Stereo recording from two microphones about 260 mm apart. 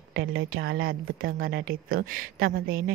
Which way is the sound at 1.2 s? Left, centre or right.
Right.